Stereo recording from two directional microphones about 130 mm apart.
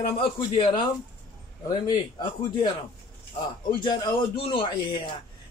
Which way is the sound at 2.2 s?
40° left (ahead or behind).